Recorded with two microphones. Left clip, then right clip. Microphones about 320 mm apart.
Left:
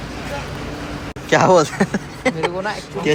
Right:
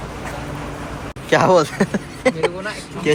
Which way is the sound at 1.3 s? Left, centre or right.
Centre.